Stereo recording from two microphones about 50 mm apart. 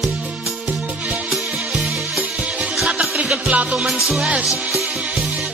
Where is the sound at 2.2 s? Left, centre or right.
Right.